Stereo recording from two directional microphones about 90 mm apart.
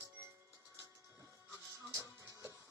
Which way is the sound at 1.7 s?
35° right (ahead or behind).